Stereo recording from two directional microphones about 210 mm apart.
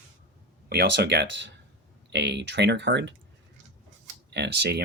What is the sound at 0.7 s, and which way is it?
Speech, 55° right (ahead or behind).